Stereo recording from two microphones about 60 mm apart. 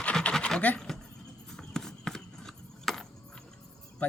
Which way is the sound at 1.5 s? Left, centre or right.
Centre.